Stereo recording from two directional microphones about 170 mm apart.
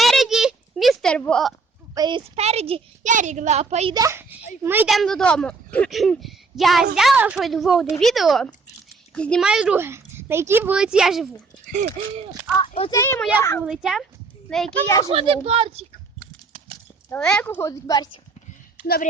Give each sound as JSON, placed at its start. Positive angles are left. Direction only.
{"t": 0.0, "sound": "a sound", "side_deg": 0}
{"t": 2.0, "sound": "a child's voice", "side_deg": -30}
{"t": 3.1, "sound": "a woman's voice", "side_deg": -45}
{"t": 3.9, "sound": "speech", "side_deg": -15}
{"t": 4.9, "sound": "a woman's voice", "side_deg": 0}
{"t": 11.7, "sound": "a woman's voice", "side_deg": -50}
{"t": 12.6, "sound": "speech", "side_deg": 35}
{"t": 12.9, "sound": "a woman's voice", "side_deg": 15}
{"t": 13.6, "sound": "a woman's voice", "side_deg": 0}
{"t": 15.0, "sound": "a child's voice", "side_deg": -35}
{"t": 17.1, "sound": "a woman's voice", "side_deg": 5}
{"t": 18.8, "sound": "a sound", "side_deg": -10}